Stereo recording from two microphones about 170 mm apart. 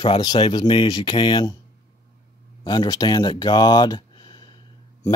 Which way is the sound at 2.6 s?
25° left (ahead or behind).